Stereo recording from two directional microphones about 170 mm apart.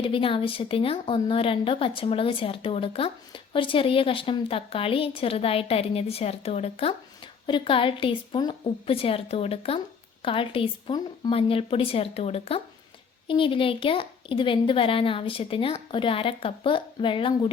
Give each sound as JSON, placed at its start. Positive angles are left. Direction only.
{"t": 0.0, "sound": "a woman's voice", "side_deg": 30}